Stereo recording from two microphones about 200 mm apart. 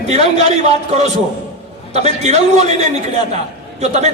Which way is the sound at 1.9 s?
35° right (ahead or behind).